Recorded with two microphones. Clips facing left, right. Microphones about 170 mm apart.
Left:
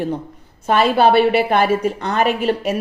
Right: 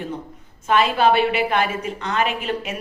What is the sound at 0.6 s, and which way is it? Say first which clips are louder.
A woman's voice: left 3 dB; 35° left (ahead or behind).